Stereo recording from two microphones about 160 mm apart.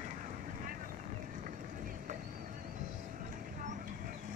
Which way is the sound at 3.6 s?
55° right (ahead or behind).